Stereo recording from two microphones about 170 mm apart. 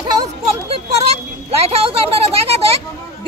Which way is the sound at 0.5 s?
35° right (ahead or behind).